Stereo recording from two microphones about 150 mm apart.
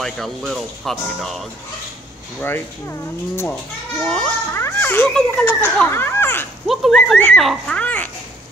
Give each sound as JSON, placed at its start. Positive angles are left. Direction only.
{"t": 0.0, "sound": "speech", "side_deg": 0}
{"t": 2.4, "sound": "speech", "side_deg": 15}
{"t": 4.0, "sound": "children playing", "side_deg": 10}
{"t": 4.6, "sound": "a child's voice", "side_deg": 15}
{"t": 6.7, "sound": "speech", "side_deg": 0}